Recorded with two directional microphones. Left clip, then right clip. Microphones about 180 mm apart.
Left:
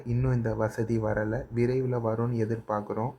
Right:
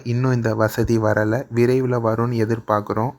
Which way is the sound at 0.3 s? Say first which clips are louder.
Right 10 dB; 30° right (ahead or behind).